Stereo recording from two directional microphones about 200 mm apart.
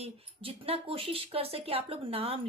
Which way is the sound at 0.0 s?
30° right (ahead or behind).